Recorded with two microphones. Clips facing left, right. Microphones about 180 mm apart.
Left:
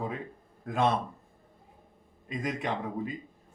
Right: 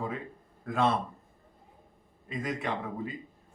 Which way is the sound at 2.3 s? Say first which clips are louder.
Left 1 dB; 15° left (ahead or behind).